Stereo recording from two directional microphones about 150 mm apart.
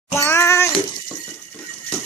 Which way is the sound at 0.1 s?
20° left (ahead or behind).